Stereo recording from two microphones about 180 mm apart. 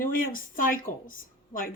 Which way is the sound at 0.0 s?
50° left (ahead or behind).